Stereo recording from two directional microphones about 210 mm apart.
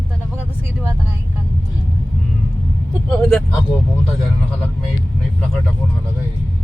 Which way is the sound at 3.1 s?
Centre (ahead or behind).